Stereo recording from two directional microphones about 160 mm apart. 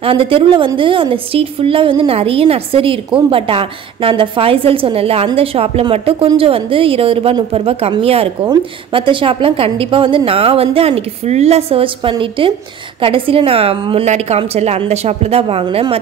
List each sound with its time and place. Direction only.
0.0 s a woman's voice: 35° right (ahead or behind)